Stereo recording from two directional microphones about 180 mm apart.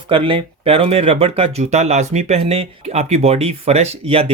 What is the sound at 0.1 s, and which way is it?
Speech, 30° right (ahead or behind).